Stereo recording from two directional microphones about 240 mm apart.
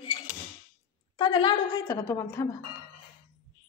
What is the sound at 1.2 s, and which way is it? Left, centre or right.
A woman's voice, centre.